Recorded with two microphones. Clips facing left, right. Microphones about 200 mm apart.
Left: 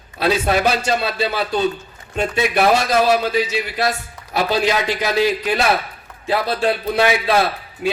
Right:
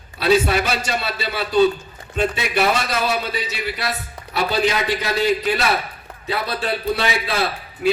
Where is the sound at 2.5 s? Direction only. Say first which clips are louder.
Left 6 dB; 45° left (ahead or behind).